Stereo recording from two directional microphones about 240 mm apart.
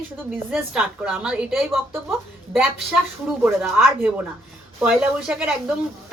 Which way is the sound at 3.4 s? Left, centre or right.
Centre.